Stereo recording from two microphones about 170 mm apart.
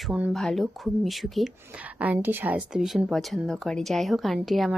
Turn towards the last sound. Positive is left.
turn(degrees=0)  # may be behind; listen again after turning